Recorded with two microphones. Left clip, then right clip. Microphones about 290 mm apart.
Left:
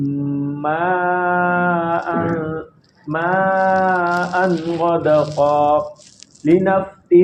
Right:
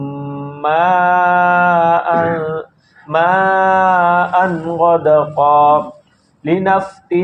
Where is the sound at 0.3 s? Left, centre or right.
Right.